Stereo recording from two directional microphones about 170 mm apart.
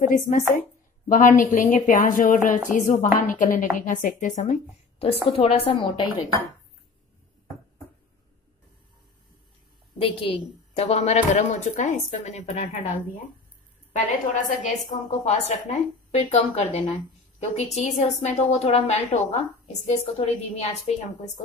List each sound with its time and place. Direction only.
0.0 s a woman's voice: 50° left (ahead or behind); by 6.0 s 30° left (ahead or behind)
9.9 s a woman's voice: 30° left (ahead or behind)
13.9 s a woman's voice: 50° left (ahead or behind)